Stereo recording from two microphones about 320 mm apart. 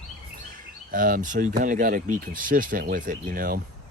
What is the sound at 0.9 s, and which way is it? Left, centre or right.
Speech, right.